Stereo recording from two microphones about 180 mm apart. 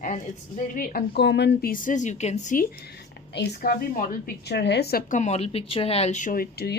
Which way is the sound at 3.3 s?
60° left (ahead or behind).